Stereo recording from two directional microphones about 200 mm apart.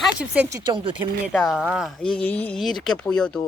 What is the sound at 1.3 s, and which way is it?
Speech, centre (ahead or behind).